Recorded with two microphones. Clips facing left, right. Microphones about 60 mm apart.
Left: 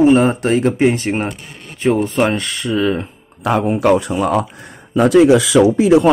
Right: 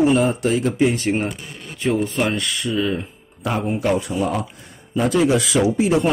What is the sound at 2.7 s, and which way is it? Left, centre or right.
Speech, left.